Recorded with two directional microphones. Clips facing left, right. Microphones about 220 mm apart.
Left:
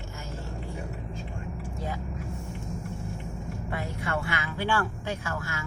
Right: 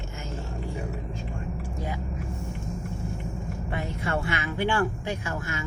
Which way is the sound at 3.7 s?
25° right (ahead or behind).